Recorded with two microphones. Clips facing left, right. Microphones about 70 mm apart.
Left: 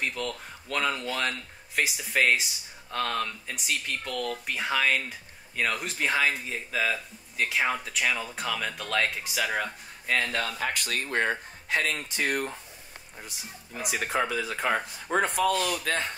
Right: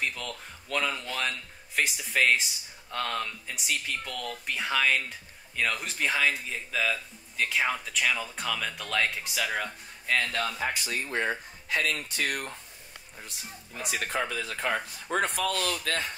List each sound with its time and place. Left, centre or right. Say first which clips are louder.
0.0 s speech: left 2 dB; centre
10.6 s speech: left 1 dB; left
11.7 s speech: left 1 dB; left
12.0 s speech: left 2 dB; centre
13.7 s speech: left 3 dB; centre